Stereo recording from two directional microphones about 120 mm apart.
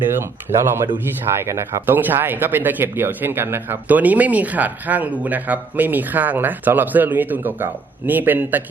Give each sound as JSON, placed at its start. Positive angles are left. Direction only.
{"t": 0.2, "sound": "speech", "side_deg": -20}